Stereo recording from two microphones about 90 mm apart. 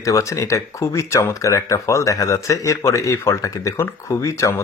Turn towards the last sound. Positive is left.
turn(degrees=35)  # may be behind; listen again after turning